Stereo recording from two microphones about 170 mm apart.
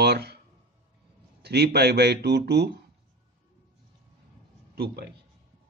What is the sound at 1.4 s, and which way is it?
Speech, 75° right (ahead or behind).